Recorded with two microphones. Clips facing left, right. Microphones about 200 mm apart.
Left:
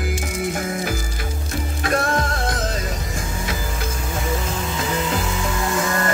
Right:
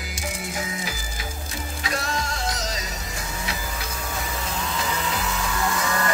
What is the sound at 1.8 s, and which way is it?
Music, 55° left (ahead or behind).